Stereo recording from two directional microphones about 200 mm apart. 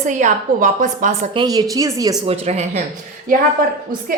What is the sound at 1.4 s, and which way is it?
Speech, 20° right (ahead or behind).